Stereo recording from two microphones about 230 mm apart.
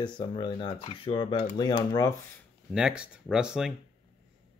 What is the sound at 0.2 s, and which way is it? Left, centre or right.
Speech, centre.